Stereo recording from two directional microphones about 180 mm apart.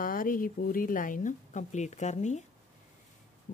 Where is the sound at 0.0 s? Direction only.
50° left (ahead or behind).